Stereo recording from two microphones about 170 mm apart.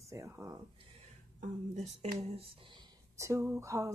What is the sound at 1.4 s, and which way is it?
Speech, 40° right (ahead or behind).